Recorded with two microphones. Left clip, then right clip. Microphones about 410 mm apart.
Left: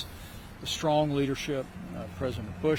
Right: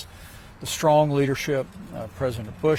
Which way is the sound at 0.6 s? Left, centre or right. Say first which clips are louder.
Right 8 dB; right.